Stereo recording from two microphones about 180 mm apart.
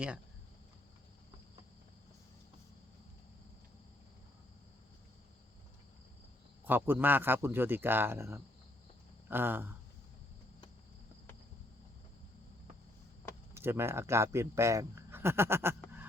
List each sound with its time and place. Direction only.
6.7 s speech: 10° right (ahead or behind)
13.5 s speech: 15° right (ahead or behind)